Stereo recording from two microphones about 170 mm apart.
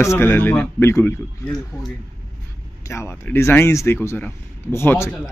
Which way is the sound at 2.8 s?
15° left (ahead or behind).